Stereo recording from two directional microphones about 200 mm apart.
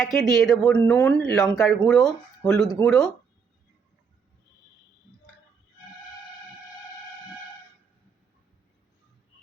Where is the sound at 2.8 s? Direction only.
15° left (ahead or behind).